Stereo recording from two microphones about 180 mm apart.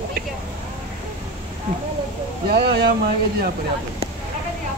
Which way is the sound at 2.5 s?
65° right (ahead or behind).